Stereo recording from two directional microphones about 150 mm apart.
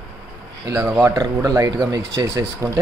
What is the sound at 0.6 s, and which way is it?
Speech, 25° right (ahead or behind).